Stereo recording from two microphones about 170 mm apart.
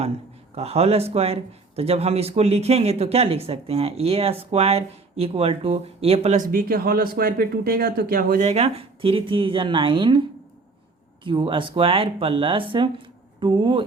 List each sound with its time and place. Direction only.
0.5 s speech: 35° right (ahead or behind); by 8.4 s 60° right (ahead or behind)
8.4 s speech: 35° right (ahead or behind)